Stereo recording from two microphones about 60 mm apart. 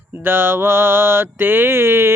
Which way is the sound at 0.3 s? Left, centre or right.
Right.